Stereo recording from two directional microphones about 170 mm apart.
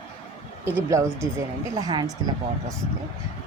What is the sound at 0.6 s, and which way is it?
Speech, 15° right (ahead or behind).